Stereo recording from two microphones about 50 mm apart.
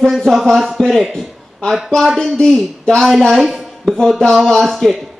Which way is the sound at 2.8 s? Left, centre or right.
Centre.